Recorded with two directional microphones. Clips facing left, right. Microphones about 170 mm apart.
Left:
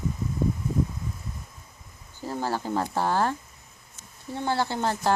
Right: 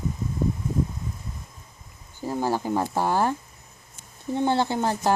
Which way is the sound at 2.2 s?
15° right (ahead or behind).